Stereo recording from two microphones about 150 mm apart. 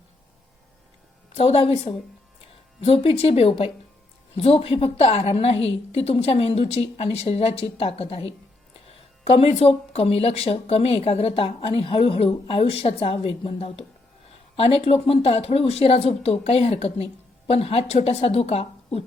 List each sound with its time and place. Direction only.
1.3 s speech: 40° left (ahead or behind)
9.6 s speech: 45° left (ahead or behind)